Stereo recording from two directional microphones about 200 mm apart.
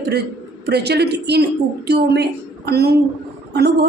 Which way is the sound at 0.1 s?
55° right (ahead or behind).